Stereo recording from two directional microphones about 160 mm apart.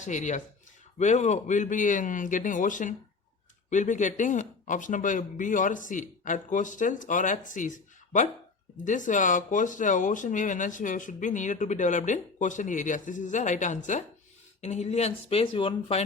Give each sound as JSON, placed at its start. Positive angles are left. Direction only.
{"t": 0.0, "sound": "speech", "side_deg": 50}